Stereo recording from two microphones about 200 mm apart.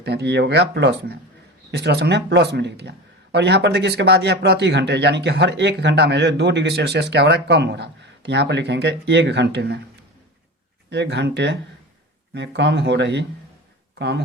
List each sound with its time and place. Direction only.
0.0 s speech: 55° right (ahead or behind)
10.8 s speech: 60° right (ahead or behind)